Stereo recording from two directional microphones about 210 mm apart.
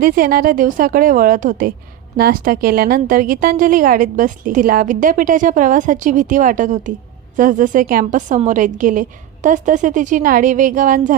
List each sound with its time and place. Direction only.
0.0 s a woman's voice: 45° right (ahead or behind)